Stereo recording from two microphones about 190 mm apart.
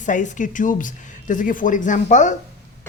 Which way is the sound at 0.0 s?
40° left (ahead or behind).